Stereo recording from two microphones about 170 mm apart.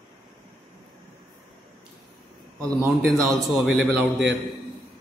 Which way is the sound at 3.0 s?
Centre (ahead or behind).